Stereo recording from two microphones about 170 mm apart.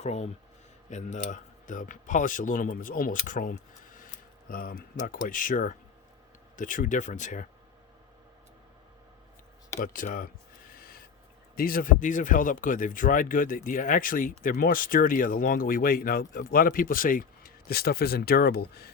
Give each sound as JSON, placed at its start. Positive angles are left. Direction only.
{"t": 0.0, "sound": "speech", "side_deg": 40}
{"t": 9.8, "sound": "speech", "side_deg": 50}
{"t": 10.8, "sound": "owl", "side_deg": 60}
{"t": 11.5, "sound": "speech", "side_deg": 55}